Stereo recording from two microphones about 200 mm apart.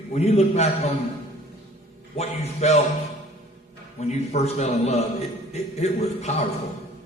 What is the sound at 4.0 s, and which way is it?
A man's voice, 35° left (ahead or behind).